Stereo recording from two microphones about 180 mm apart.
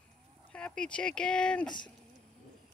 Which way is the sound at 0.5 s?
5° left (ahead or behind).